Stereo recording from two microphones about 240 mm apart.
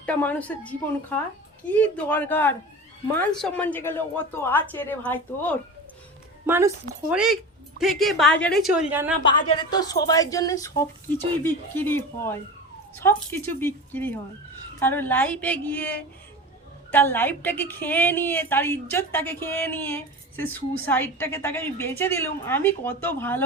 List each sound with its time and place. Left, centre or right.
0.0 s a woman's voice: centre
6.4 s a woman's voice: centre
9.2 s a woman's voice: centre